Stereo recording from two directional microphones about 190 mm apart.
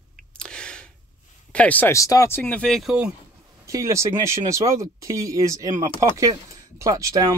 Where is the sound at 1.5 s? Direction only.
5° left (ahead or behind).